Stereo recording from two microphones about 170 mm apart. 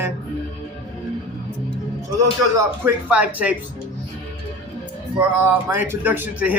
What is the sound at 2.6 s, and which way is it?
Speech, 10° right (ahead or behind).